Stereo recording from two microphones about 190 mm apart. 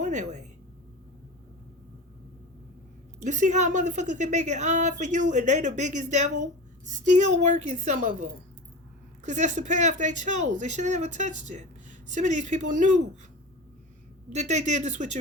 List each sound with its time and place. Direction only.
0.0 s a woman's voice: 40° right (ahead or behind)
3.2 s speech: 40° right (ahead or behind)
14.3 s speech: 40° right (ahead or behind)